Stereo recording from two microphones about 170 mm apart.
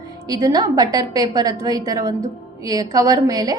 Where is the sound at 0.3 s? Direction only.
20° right (ahead or behind).